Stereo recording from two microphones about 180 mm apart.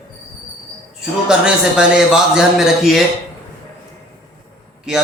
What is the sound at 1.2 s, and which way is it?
A man's voice, 5° right (ahead or behind).